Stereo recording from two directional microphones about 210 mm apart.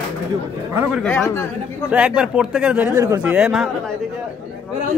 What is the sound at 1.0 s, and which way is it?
Speech, 10° left (ahead or behind).